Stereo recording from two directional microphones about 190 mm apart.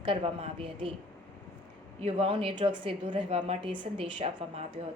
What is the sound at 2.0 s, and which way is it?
A woman's voice, 30° right (ahead or behind).